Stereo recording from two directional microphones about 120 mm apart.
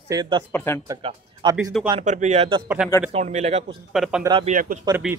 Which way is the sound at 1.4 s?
40° right (ahead or behind).